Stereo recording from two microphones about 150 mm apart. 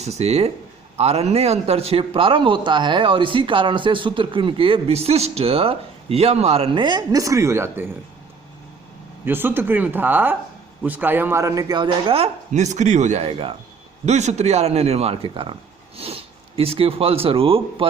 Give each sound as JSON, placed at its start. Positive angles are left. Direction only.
{"t": 0.0, "sound": "a man's voice", "side_deg": -45}
{"t": 9.2, "sound": "speech", "side_deg": -15}
{"t": 12.5, "sound": "speech", "side_deg": -50}